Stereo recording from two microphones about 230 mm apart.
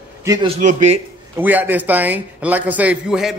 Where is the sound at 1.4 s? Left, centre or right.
Centre.